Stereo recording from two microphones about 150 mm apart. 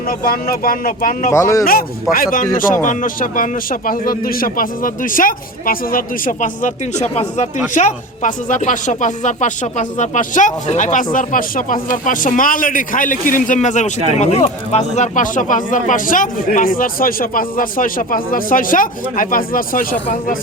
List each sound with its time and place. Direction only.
0.1 s a man's voice: 80° left
1.3 s a man's voice: 20° left (ahead or behind)
2.1 s a man's voice: 65° left (ahead or behind)